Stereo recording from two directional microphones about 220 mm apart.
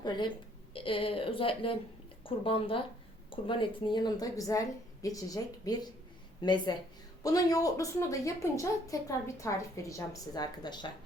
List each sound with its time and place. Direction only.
0.0 s a woman's voice: 20° left (ahead or behind)